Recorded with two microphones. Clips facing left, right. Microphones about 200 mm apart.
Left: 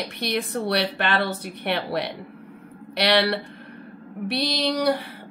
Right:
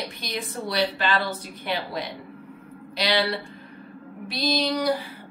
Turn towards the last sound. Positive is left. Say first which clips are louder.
# left 1 dB
turn(degrees=65)  # may be behind; listen again after turning